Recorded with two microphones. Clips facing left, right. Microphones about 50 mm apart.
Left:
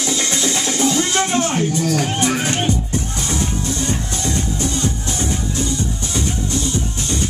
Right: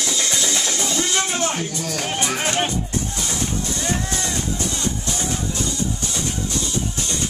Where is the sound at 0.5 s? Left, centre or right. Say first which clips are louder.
Left 5 dB; centre.